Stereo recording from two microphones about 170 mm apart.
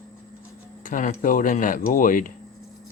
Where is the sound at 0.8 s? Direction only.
50° left (ahead or behind).